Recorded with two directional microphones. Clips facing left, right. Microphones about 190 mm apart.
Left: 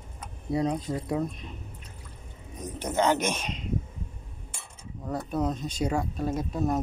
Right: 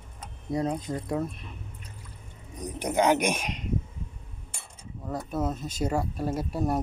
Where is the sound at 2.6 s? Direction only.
15° right (ahead or behind).